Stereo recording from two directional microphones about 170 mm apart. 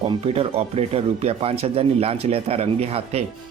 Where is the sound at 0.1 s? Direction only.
35° right (ahead or behind).